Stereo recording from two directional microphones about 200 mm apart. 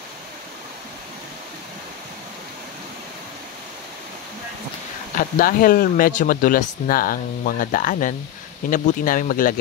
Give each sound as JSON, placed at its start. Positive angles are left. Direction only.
{"t": 5.1, "sound": "speech", "side_deg": 45}